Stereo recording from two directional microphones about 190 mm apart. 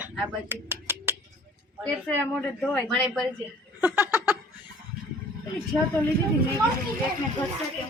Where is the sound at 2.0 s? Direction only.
5° left (ahead or behind).